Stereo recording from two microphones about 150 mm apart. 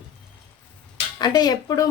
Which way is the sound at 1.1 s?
25° left (ahead or behind).